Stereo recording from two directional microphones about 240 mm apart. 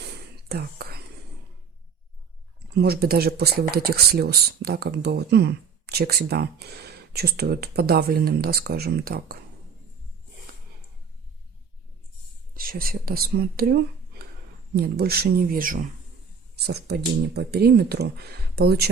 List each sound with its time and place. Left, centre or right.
0.0 s whispering: right
2.7 s speech: right
12.5 s speech: right
14.8 s speech: right